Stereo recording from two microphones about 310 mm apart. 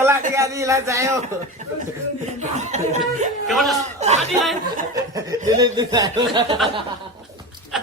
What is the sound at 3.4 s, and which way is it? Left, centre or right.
Speech, centre.